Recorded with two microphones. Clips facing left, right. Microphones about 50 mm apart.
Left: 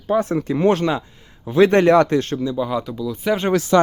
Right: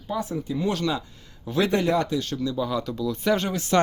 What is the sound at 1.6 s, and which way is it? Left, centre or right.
Speech, left.